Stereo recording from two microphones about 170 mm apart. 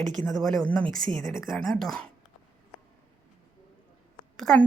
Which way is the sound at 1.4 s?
Centre (ahead or behind).